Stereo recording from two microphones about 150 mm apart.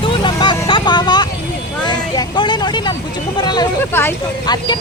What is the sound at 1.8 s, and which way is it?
Vehicle, 30° left (ahead or behind).